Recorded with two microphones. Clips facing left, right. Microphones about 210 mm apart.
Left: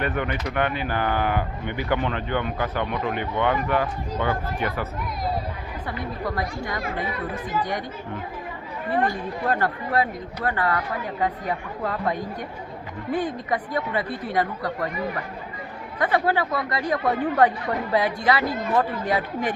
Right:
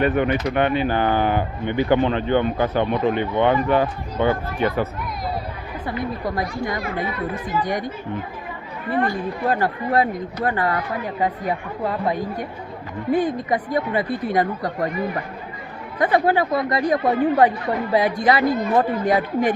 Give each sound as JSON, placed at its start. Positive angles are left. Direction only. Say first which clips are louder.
{"t": 0.0, "sound": "speech", "louder": "right 7 dB", "side_deg": -20}
{"t": 6.0, "sound": "speech", "louder": "right 3 dB", "side_deg": -15}
{"t": 9.5, "sound": "speech", "louder": "right 3 dB", "side_deg": -10}
{"t": 16.0, "sound": "speech", "louder": "right 4 dB", "side_deg": -15}